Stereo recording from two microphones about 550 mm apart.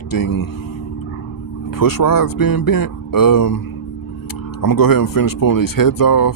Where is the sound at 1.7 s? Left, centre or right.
Left.